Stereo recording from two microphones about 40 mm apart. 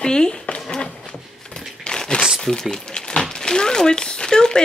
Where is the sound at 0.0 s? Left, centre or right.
Centre.